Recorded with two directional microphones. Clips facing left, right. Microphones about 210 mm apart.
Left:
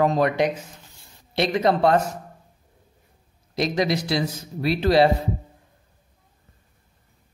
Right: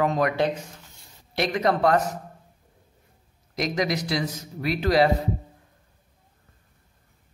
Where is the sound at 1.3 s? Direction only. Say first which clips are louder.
Left 3 dB; 25° left (ahead or behind).